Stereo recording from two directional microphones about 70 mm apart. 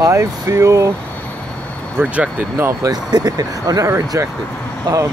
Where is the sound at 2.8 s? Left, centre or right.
Right.